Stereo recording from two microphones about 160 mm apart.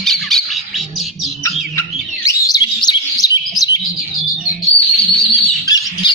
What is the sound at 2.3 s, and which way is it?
Bird, 25° left (ahead or behind).